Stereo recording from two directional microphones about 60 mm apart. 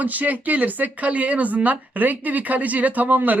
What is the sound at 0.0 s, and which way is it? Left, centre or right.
Speech, right.